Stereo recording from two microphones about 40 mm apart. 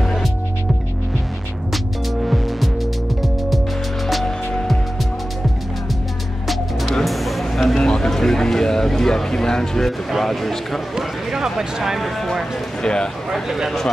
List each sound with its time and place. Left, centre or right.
2.2 s music: centre
6.4 s music: centre
7.7 s a sound: centre
8.1 s speech: centre
9.8 s speech: centre
11.0 s speech: centre
12.0 s speech: centre
12.8 s speech: left
13.3 s speech: centre